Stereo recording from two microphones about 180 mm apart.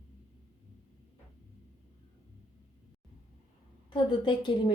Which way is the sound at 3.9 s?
25° left (ahead or behind).